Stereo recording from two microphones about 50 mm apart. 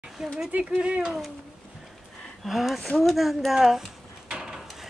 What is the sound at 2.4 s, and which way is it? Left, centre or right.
Speech, centre.